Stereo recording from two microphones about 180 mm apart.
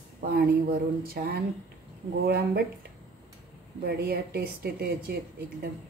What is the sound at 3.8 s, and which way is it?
Speech, 60° right (ahead or behind).